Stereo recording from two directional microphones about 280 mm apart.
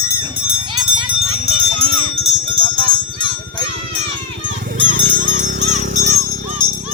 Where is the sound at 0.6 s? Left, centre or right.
Centre.